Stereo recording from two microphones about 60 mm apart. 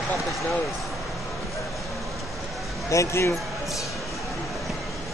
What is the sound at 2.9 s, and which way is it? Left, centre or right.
Speech, left.